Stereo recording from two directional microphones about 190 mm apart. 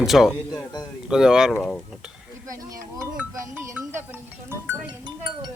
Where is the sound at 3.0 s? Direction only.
15° right (ahead or behind).